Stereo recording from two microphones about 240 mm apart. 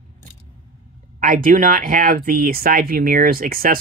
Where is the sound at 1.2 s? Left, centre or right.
Right.